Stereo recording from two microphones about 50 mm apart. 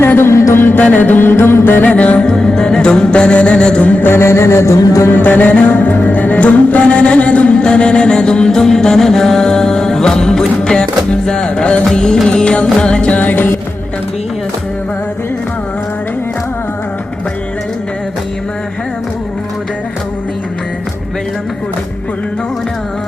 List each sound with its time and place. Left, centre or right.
0.2 s music: left
0.9 s music: left
2.0 s music: left
2.2 s music: centre
4.0 s music: left
5.1 s music: left